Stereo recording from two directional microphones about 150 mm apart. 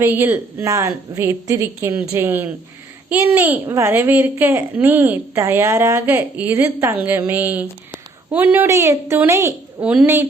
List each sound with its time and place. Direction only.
0.0 s a child's voice: 15° right (ahead or behind)